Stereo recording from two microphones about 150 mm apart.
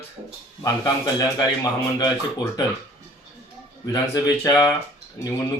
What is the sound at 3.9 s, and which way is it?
Speech, 25° left (ahead or behind).